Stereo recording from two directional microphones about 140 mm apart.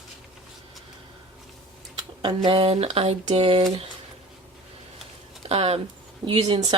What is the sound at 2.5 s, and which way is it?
Speech, 45° right (ahead or behind).